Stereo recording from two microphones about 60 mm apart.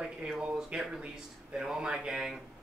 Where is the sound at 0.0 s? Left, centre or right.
Centre.